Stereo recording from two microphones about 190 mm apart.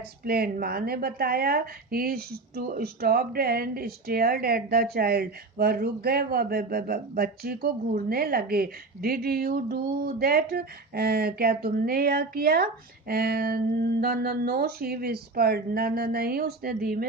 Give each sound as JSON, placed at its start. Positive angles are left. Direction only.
{"t": 0.3, "sound": "speech", "side_deg": -50}